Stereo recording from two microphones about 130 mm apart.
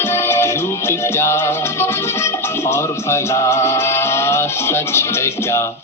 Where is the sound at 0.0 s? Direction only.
20° left (ahead or behind).